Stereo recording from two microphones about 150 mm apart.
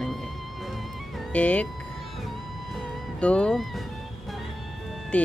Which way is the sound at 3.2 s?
5° left (ahead or behind).